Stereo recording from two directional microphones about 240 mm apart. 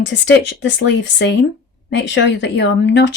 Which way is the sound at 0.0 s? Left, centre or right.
Left.